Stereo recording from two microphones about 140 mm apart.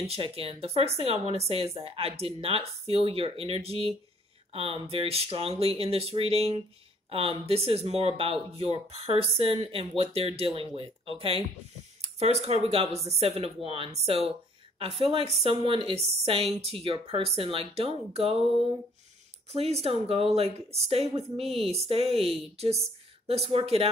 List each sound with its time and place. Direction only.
0.0 s speech: 45° right (ahead or behind)
19.5 s speech: 50° right (ahead or behind)